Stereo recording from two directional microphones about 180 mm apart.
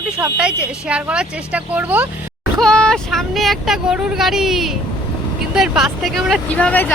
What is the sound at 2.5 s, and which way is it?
Speech, 5° left (ahead or behind).